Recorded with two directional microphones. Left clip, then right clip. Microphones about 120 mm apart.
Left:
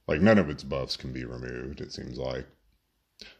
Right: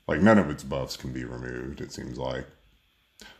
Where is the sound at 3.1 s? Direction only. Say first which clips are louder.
Even; 30° left (ahead or behind).